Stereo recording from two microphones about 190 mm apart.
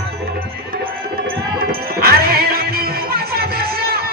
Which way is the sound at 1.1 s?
50° right (ahead or behind).